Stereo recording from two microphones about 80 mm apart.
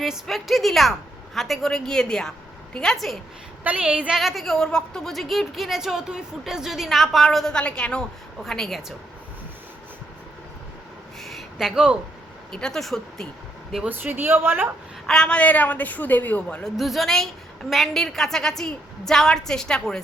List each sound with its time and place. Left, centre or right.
0.0 s a woman's voice: centre
3.6 s a woman's voice: centre
4.1 s a woman's voice: centre
11.2 s a sound: centre
12.5 s a woman's voice: centre
13.8 s a woman's voice: right
15.0 s a woman's voice: centre
16.6 s a woman's voice: centre